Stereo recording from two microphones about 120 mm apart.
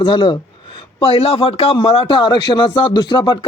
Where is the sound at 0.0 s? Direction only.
45° left (ahead or behind).